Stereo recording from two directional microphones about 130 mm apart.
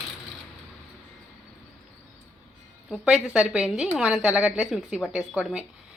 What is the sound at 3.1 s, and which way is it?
A woman's voice, 5° right (ahead or behind).